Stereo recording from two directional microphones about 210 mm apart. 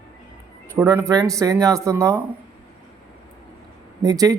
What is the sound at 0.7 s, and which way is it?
Speech, 10° right (ahead or behind).